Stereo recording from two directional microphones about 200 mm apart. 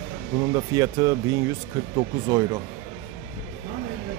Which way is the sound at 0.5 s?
20° right (ahead or behind).